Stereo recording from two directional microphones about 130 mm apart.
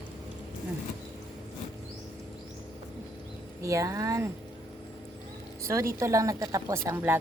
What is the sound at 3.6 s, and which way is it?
Speech, 25° right (ahead or behind).